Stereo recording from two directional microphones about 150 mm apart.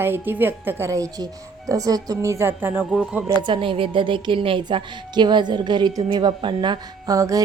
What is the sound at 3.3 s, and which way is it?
A woman's voice, 30° right (ahead or behind).